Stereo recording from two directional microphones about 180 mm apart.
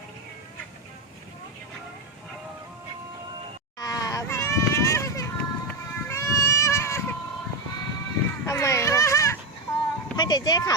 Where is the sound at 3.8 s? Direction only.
20° left (ahead or behind).